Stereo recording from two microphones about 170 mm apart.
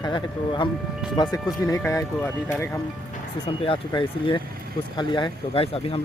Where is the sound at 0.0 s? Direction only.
25° left (ahead or behind).